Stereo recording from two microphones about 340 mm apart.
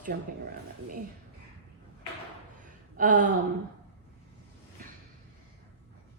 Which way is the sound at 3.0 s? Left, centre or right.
Right.